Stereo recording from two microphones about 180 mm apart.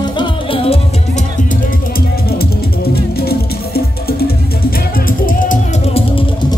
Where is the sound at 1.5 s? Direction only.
50° left (ahead or behind).